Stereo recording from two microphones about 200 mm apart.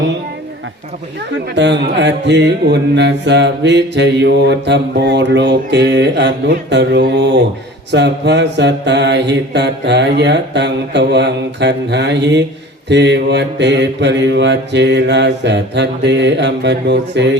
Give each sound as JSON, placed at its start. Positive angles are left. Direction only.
{"t": 1.5, "sound": "mantra", "side_deg": -60}